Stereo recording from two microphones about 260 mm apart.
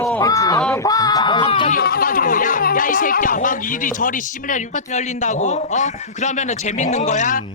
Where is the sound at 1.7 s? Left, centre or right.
Left.